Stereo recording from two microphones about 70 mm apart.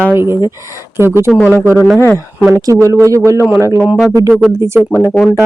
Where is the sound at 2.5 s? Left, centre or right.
Right.